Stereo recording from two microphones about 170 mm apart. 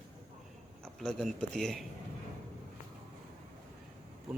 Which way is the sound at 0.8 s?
5° left (ahead or behind).